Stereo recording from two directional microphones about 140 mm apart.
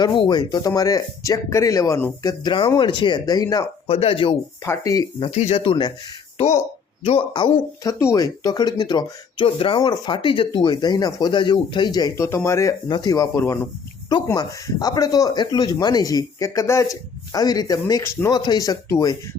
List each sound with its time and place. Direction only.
0.0 s speech: 35° left (ahead or behind)
2.2 s speech: 35° left (ahead or behind)
3.8 s speech: 45° left (ahead or behind)
4.6 s speech: 20° left (ahead or behind)
5.2 s speech: 50° left (ahead or behind)
6.3 s speech: 50° left (ahead or behind)
7.3 s speech: 35° left (ahead or behind)
7.9 s speech: 25° left (ahead or behind)
13.4 s speech: 15° left (ahead or behind)
14.3 s speech: 25° left (ahead or behind)